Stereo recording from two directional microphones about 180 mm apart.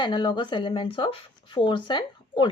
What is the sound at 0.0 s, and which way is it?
Speech, 25° left (ahead or behind).